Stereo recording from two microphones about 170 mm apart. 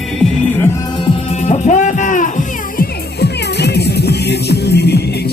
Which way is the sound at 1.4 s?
45° left (ahead or behind).